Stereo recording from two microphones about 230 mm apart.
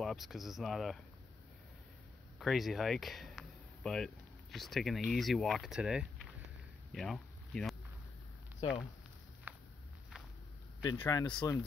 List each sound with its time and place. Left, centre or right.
0.0 s speech: centre
2.3 s speech: centre
6.9 s a sound: centre
9.5 s walk: centre
10.8 s speech: centre